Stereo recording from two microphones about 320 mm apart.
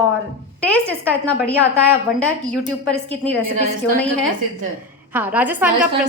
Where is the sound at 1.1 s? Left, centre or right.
Centre.